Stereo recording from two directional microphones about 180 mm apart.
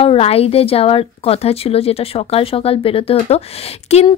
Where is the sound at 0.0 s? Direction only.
35° left (ahead or behind).